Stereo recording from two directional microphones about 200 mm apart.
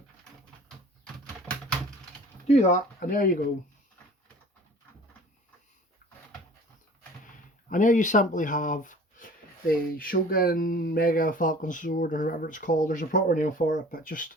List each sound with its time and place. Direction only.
1.0 s a sound: 5° left (ahead or behind)
2.5 s speech: 35° left (ahead or behind)
7.7 s speech: 40° left (ahead or behind)